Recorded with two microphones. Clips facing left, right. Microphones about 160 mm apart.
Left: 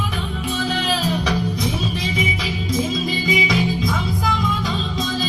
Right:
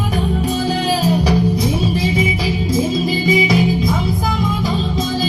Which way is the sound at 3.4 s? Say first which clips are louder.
Right 5 dB; 25° right (ahead or behind).